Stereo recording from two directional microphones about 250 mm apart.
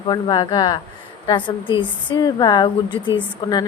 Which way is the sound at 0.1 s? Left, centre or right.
Centre.